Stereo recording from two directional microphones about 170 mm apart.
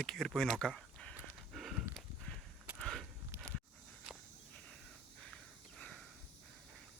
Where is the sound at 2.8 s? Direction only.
5° left (ahead or behind).